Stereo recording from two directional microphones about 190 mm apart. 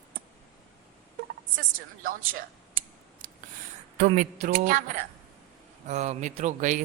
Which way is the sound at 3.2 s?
45° right (ahead or behind).